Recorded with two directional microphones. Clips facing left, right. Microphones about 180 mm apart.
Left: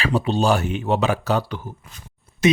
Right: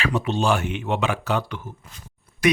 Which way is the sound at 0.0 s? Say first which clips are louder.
Left 3 dB; 35° left (ahead or behind).